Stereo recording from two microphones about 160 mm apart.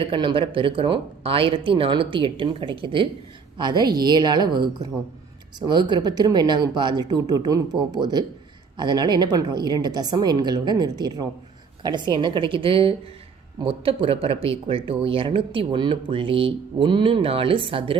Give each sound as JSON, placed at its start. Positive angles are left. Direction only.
{"t": 0.1, "sound": "speech", "side_deg": -30}